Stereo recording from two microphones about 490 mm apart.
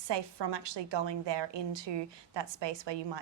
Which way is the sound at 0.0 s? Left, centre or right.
Right.